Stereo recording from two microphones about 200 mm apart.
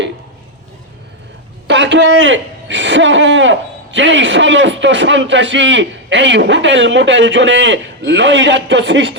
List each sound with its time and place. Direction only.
1.6 s speech: 60° right (ahead or behind)